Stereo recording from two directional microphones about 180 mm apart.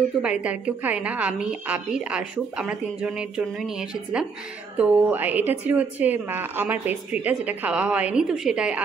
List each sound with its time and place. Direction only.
0.2 s a woman's voice: 5° right (ahead or behind)